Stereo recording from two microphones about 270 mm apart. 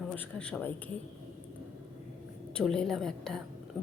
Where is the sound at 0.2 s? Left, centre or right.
Centre.